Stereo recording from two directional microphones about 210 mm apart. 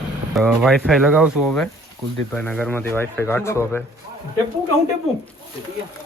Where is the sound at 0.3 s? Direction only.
Centre (ahead or behind).